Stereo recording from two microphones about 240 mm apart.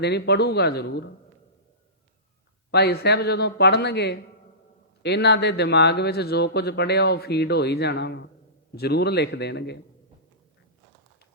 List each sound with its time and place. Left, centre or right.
0.0 s speech: left
2.7 s speech: left